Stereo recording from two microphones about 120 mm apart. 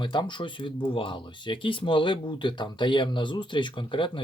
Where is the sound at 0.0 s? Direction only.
40° left (ahead or behind).